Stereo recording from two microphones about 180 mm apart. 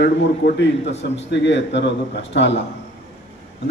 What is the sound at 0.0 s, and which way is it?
Speech, 60° left (ahead or behind).